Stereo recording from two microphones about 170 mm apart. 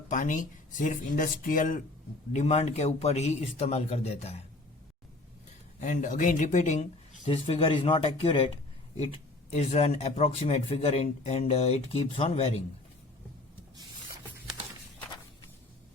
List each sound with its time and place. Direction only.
0.1 s speech: 50° left (ahead or behind)
2.3 s speech: 40° left (ahead or behind)
5.8 s speech: 50° left (ahead or behind)
9.5 s speech: 40° left (ahead or behind)